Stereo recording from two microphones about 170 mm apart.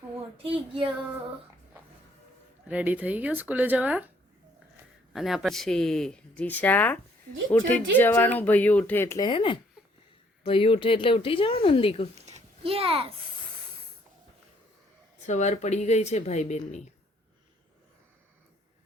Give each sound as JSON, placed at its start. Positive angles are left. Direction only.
{"t": 0.4, "sound": "speech", "side_deg": -30}
{"t": 2.6, "sound": "speech", "side_deg": -10}
{"t": 5.1, "sound": "speech", "side_deg": 0}
{"t": 12.2, "sound": "a sound", "side_deg": -40}
{"t": 15.3, "sound": "speech", "side_deg": 45}